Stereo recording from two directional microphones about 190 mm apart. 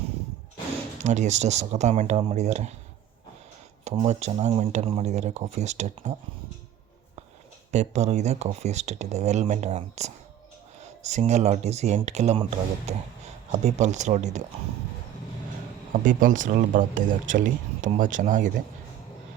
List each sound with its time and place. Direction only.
1.0 s speech: 40° right (ahead or behind)
4.0 s speech: 35° right (ahead or behind)
7.7 s speech: 35° right (ahead or behind)
15.9 s speech: 45° right (ahead or behind)